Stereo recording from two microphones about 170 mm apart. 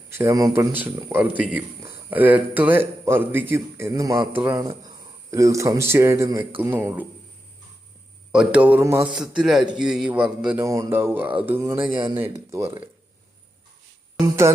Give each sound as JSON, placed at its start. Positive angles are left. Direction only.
{"t": 0.1, "sound": "a man's voice", "side_deg": -15}
{"t": 4.5, "sound": "a man's voice", "side_deg": -20}
{"t": 8.3, "sound": "a man's voice", "side_deg": -5}
{"t": 10.6, "sound": "a man's voice", "side_deg": -15}
{"t": 11.8, "sound": "speech", "side_deg": -30}
{"t": 12.2, "sound": "a man's voice", "side_deg": -15}